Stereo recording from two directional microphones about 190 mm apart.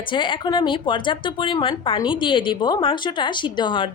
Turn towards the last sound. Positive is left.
turn(degrees=25)  # may be behind; listen again after turning